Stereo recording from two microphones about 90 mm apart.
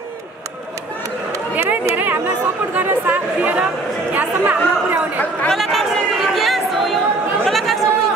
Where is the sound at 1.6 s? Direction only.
25° right (ahead or behind).